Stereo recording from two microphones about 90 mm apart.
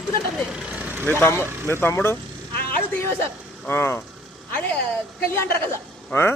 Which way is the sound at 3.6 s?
25° left (ahead or behind).